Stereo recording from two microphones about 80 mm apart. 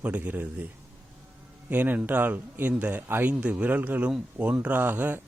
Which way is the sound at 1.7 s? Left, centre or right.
Right.